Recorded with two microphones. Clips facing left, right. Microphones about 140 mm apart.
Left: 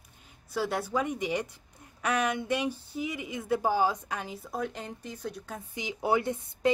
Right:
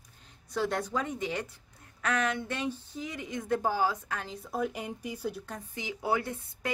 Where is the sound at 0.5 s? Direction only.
5° left (ahead or behind).